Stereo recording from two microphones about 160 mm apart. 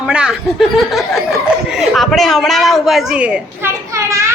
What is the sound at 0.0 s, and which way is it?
A man's voice, 5° right (ahead or behind).